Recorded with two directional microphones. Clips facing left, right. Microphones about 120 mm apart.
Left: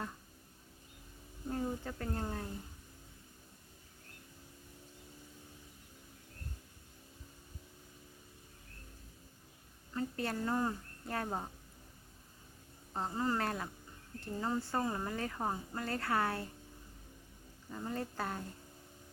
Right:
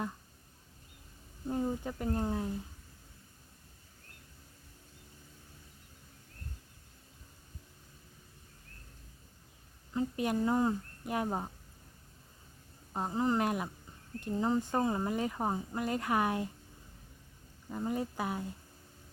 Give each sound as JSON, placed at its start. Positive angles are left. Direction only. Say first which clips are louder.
{"t": 1.5, "sound": "speech", "louder": "right 4 dB", "side_deg": -15}
{"t": 9.9, "sound": "speech", "louder": "right 5 dB", "side_deg": -15}
{"t": 12.9, "sound": "speech", "louder": "right 4 dB", "side_deg": -15}
{"t": 17.7, "sound": "speech", "louder": "right 5 dB", "side_deg": -15}